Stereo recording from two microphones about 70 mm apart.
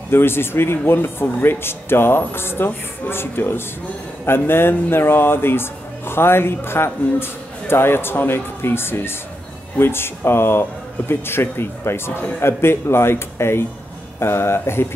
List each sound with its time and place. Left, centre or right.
0.1 s speech: left